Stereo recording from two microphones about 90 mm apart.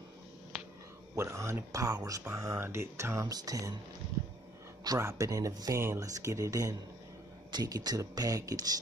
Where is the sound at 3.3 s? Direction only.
40° right (ahead or behind).